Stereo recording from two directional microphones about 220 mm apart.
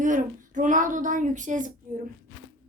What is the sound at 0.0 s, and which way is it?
Speech, 35° right (ahead or behind).